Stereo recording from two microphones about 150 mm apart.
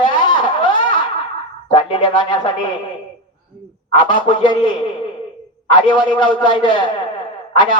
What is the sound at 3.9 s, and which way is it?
Speech, 35° left (ahead or behind).